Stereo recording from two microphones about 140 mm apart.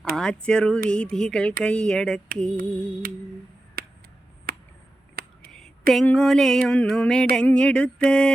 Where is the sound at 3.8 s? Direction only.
90° right.